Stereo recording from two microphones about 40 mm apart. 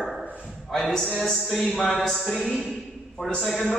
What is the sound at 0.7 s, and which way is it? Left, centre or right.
Speech, centre.